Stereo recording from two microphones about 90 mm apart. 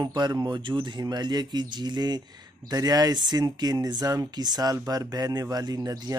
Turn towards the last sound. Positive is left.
turn(degrees=-45)  # may be behind; listen again after turning